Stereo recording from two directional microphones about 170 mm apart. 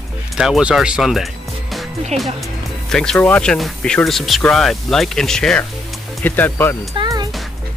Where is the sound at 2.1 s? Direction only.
40° right (ahead or behind).